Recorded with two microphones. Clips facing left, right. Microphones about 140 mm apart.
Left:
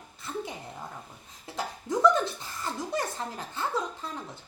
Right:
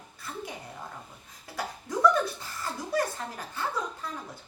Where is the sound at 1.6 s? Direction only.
25° left (ahead or behind).